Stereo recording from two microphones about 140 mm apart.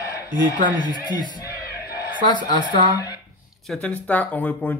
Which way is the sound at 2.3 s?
30° left (ahead or behind).